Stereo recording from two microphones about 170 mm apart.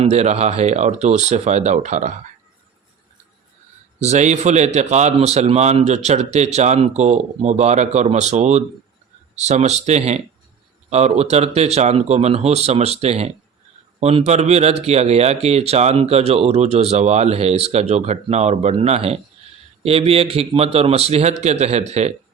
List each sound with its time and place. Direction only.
0.0 s speech: 40° right (ahead or behind)
4.0 s speech: 45° right (ahead or behind)